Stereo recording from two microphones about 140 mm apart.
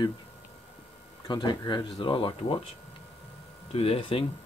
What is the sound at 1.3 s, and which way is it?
Speech, 30° left (ahead or behind).